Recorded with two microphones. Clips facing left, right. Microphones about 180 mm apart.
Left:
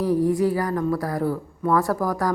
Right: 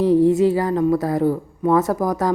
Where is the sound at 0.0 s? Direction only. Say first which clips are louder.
Right 6 dB; 25° right (ahead or behind).